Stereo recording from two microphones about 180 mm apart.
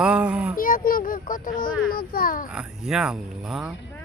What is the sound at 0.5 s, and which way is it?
A child's voice, 50° left (ahead or behind).